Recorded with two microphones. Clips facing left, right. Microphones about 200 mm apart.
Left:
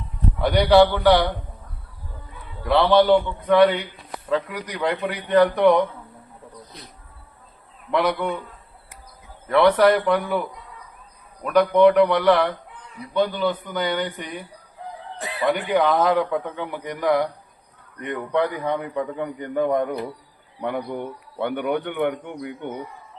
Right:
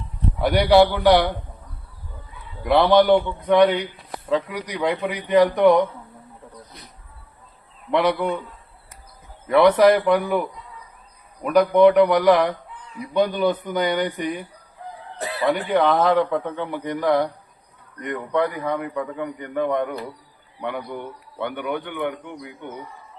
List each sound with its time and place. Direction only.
0.4 s a man's voice: 10° right (ahead or behind)
2.6 s a man's voice: 15° right (ahead or behind)
7.9 s a man's voice: 5° right (ahead or behind)
9.5 s a man's voice: 5° right (ahead or behind)
11.4 s a man's voice: 5° right (ahead or behind)
15.4 s a man's voice: centre (ahead or behind)
18.1 s a man's voice: 15° left (ahead or behind); by 19.8 s 30° left (ahead or behind)
21.4 s a man's voice: 50° left (ahead or behind)